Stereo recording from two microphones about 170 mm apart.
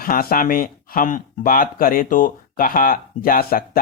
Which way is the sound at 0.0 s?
60° left (ahead or behind).